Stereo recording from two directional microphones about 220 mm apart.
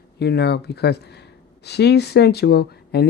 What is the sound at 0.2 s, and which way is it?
Speech, 50° left (ahead or behind).